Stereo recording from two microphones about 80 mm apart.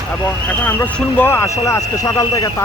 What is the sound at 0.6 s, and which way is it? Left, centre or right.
Speech, left.